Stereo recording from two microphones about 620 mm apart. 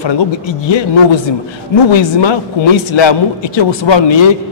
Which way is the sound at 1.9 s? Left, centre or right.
Left.